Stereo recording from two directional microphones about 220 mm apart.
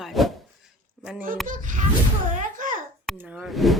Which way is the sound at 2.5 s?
35° right (ahead or behind).